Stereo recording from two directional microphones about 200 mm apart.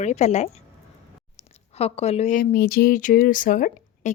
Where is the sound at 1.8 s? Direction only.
30° left (ahead or behind).